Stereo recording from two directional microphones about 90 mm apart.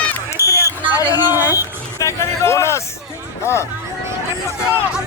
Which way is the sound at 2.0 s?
30° left (ahead or behind).